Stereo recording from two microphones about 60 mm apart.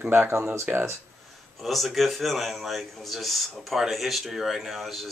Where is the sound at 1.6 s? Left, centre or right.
Centre.